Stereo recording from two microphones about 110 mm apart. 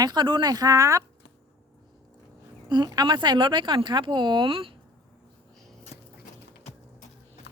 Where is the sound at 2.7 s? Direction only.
40° right (ahead or behind); by 4.8 s 55° right (ahead or behind).